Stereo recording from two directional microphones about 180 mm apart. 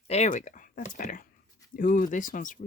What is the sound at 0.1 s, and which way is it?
Speech, 40° left (ahead or behind).